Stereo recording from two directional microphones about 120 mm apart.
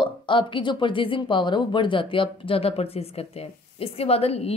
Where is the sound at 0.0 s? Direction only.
45° left (ahead or behind).